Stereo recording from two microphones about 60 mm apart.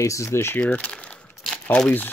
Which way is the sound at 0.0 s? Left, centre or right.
Left.